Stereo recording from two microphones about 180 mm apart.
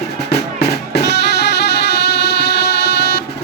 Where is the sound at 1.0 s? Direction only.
70° left (ahead or behind).